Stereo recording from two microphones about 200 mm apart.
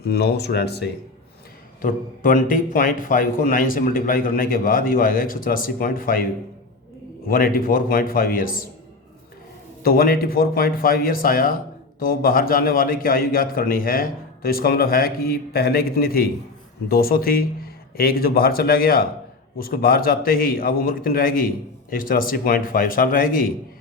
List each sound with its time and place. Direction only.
0.0 s speech: 55° left (ahead or behind)
1.8 s a man's voice: 45° left (ahead or behind)
7.3 s a man's voice: 45° left (ahead or behind)
9.8 s a man's voice: 50° left (ahead or behind)